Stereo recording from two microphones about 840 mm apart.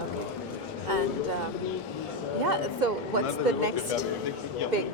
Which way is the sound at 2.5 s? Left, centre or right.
Right.